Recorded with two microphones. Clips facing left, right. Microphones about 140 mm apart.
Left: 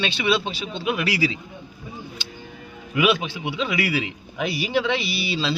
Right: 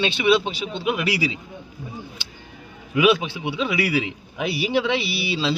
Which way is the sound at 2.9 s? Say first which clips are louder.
Right 3 dB; 20° right (ahead or behind).